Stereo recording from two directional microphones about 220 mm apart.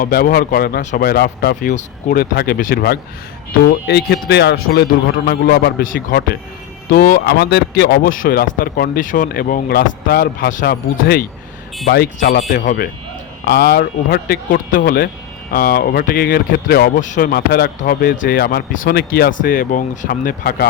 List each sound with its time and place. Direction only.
0.0 s speech: 40° left (ahead or behind)